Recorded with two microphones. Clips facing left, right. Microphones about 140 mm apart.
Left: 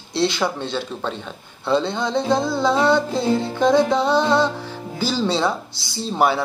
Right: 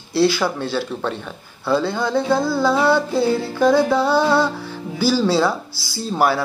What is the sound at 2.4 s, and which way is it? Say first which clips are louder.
Speech: right 2 dB; 5° right (ahead or behind).